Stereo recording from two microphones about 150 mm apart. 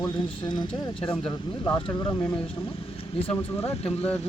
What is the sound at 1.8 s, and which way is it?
Speech, 35° left (ahead or behind).